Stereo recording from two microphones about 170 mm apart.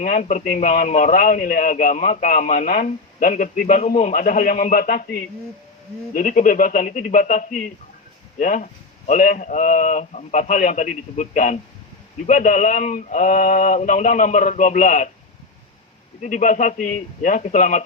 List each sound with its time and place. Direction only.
0.0 s speech: 50° left (ahead or behind)
16.2 s speech: 50° left (ahead or behind)